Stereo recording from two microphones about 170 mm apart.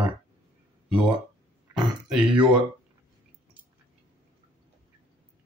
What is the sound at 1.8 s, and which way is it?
Throat clearing, 30° right (ahead or behind).